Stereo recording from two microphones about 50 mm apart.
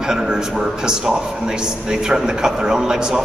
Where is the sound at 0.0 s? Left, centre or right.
Centre.